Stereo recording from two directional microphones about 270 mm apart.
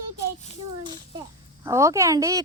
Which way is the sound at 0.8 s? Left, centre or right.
Centre.